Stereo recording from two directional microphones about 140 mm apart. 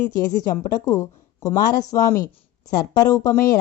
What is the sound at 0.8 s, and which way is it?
Speech, 25° left (ahead or behind).